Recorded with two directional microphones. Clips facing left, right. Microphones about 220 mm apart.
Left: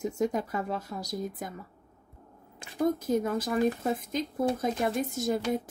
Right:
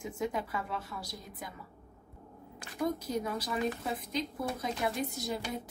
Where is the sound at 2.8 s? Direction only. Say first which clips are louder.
Left 6 dB; 50° left (ahead or behind).